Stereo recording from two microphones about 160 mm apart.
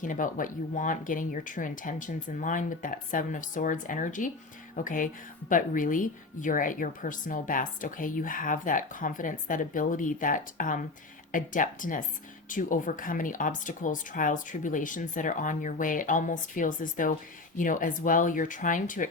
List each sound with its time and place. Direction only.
0.0 s a woman's voice: 55° left (ahead or behind)